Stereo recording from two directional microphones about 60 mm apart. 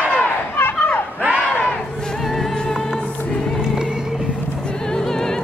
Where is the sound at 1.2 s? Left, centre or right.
Right.